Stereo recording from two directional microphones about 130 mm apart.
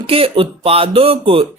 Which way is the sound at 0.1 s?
45° right (ahead or behind).